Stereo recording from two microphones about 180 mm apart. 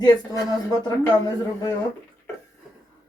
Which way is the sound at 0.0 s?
20° left (ahead or behind).